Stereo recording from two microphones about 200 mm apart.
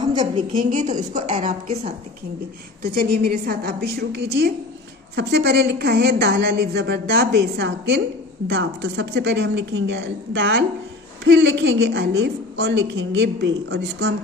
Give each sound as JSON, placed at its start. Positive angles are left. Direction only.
{"t": 0.0, "sound": "a woman's voice", "side_deg": -20}
{"t": 2.9, "sound": "a woman's voice", "side_deg": -45}